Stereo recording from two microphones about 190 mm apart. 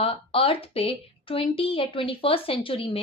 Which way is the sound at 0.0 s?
30° left (ahead or behind).